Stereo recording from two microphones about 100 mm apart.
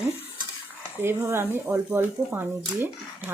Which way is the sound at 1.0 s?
25° right (ahead or behind).